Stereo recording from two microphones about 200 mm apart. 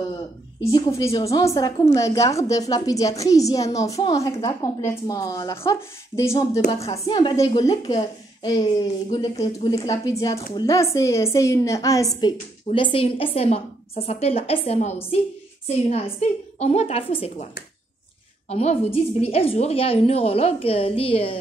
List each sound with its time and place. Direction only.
0.7 s a woman's voice: 20° left (ahead or behind)
18.5 s a woman's voice: 30° left (ahead or behind)